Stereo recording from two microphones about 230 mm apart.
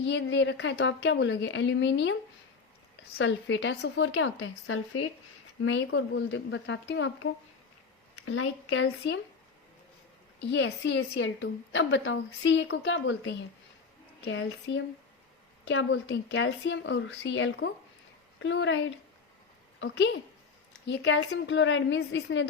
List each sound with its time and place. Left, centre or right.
0.0 s a woman's voice: left
3.2 s a woman's voice: left
8.2 s speech: left
10.4 s a woman's voice: left
20.8 s a woman's voice: left